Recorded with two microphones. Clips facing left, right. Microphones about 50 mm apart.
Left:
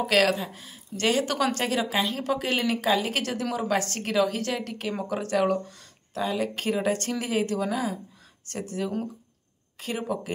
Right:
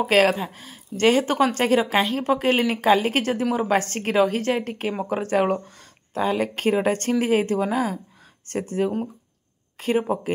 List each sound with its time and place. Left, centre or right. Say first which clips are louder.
0.0 s speech: right 4 dB; right